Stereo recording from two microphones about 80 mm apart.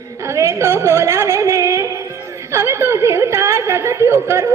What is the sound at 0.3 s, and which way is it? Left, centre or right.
A woman's voice, right.